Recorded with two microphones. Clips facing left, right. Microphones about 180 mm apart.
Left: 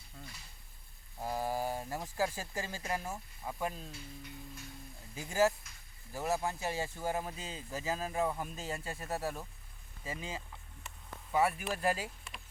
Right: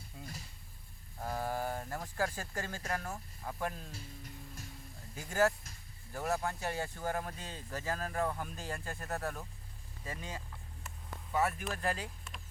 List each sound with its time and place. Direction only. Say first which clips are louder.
0.2 s a sound: right 3 dB; 10° right (ahead or behind)
1.2 s speech: left 1 dB; 10° left (ahead or behind)
3.9 s speech: left 1 dB; 45° right (ahead or behind)
5.1 s speech: left 1 dB; 5° left (ahead or behind)